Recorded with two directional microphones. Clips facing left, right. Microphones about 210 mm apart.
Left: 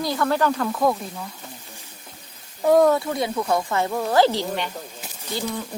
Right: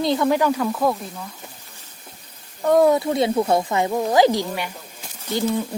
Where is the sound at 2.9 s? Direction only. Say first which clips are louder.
Right 5 dB; 25° right (ahead or behind).